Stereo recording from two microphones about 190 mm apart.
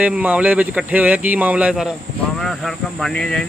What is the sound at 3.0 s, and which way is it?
Speech, 5° left (ahead or behind).